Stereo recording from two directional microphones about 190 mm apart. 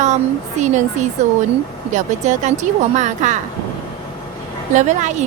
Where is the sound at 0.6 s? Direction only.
40° right (ahead or behind).